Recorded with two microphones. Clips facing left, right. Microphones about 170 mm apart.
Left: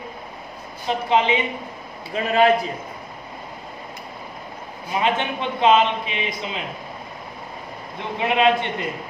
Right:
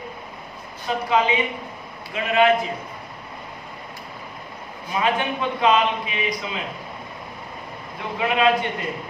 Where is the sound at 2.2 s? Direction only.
35° left (ahead or behind).